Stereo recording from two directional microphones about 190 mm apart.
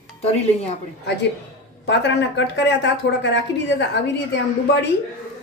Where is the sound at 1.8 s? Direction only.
65° left (ahead or behind).